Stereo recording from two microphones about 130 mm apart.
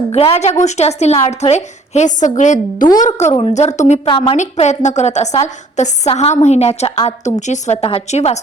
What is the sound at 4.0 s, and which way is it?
Speech, 45° left (ahead or behind).